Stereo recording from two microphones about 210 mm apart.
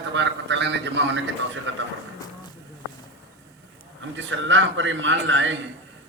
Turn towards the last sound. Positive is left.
turn(degrees=-65)  # may be behind; listen again after turning